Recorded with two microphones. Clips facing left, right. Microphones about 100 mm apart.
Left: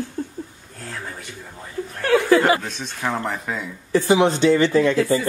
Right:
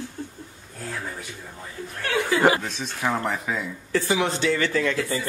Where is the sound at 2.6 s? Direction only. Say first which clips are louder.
Even; centre (ahead or behind).